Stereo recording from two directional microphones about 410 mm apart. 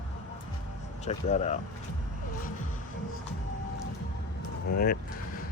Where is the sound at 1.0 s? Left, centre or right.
Centre.